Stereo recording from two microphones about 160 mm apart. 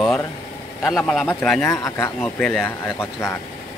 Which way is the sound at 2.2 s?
10° left (ahead or behind).